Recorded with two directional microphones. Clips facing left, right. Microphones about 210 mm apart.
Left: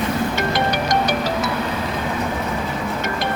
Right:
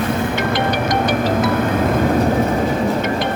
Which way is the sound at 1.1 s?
50° right (ahead or behind).